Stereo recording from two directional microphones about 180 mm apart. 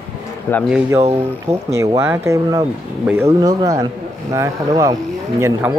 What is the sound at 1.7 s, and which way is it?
Speech, 15° right (ahead or behind).